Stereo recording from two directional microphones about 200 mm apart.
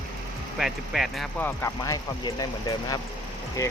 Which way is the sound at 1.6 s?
15° left (ahead or behind).